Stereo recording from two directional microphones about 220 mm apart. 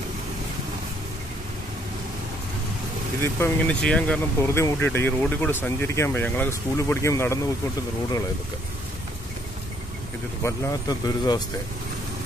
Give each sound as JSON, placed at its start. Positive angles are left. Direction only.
{"t": 3.2, "sound": "speech", "side_deg": 10}
{"t": 10.4, "sound": "speech", "side_deg": 15}